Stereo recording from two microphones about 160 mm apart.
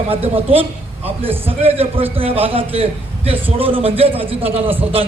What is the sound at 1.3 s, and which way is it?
Speech, 10° right (ahead or behind).